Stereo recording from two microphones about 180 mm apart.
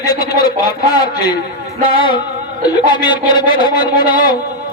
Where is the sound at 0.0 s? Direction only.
20° left (ahead or behind).